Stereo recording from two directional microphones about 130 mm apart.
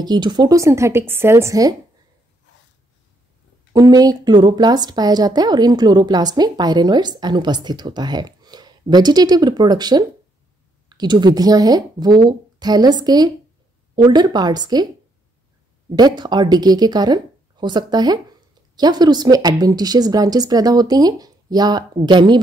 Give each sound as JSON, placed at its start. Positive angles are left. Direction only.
{"t": 0.0, "sound": "speech", "side_deg": -35}
{"t": 3.7, "sound": "a woman's voice", "side_deg": -30}
{"t": 15.9, "sound": "a woman's voice", "side_deg": -35}